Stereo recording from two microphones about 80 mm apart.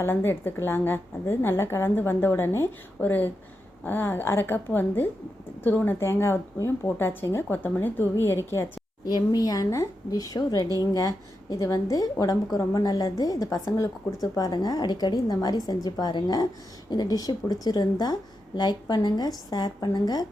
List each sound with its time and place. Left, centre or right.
0.0 s a woman's voice: left
9.0 s a woman's voice: left